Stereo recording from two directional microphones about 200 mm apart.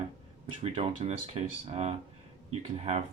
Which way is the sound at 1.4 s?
30° right (ahead or behind).